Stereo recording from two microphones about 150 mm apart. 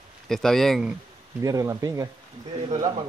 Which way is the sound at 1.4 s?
20° right (ahead or behind).